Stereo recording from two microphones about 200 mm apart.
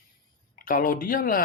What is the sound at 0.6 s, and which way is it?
Speech, 45° left (ahead or behind).